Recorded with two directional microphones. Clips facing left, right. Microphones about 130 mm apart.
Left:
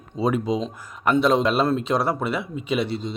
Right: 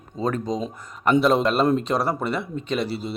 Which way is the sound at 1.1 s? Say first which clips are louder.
Even; centre (ahead or behind).